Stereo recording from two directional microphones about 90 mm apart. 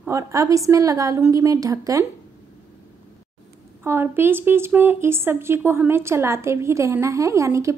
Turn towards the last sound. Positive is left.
turn(degrees=-35)  # may be behind; listen again after turning